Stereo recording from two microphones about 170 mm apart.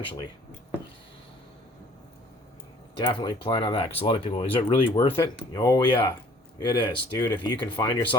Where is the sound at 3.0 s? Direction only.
25° left (ahead or behind).